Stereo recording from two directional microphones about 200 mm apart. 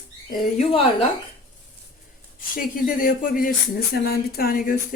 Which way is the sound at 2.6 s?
45° left (ahead or behind).